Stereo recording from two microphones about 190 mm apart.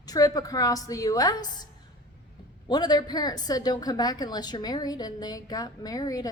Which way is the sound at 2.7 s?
20° left (ahead or behind).